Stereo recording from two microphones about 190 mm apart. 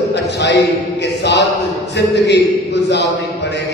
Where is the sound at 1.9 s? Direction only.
65° left (ahead or behind).